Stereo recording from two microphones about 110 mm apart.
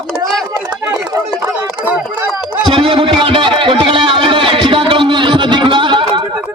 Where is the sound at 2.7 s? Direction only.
50° right (ahead or behind).